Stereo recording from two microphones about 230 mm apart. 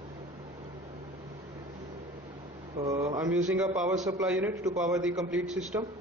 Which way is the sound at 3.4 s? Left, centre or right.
Centre.